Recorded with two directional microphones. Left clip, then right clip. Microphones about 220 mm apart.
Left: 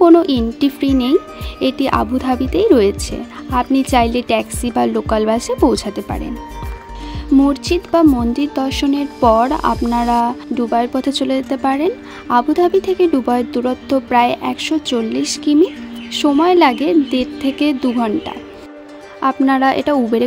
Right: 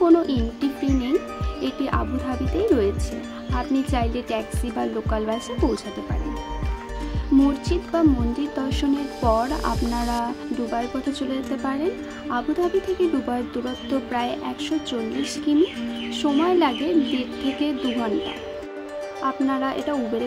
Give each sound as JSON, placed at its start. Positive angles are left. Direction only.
{"t": 0.0, "sound": "music", "side_deg": 40}
{"t": 3.5, "sound": "speech", "side_deg": 40}
{"t": 7.4, "sound": "speech", "side_deg": 40}
{"t": 19.2, "sound": "speech", "side_deg": 45}